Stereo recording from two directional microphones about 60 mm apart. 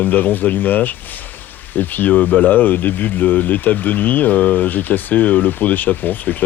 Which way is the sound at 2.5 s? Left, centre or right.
Left.